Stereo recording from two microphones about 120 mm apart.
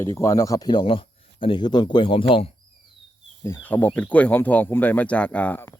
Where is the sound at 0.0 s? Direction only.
25° left (ahead or behind); by 2.5 s 50° left (ahead or behind).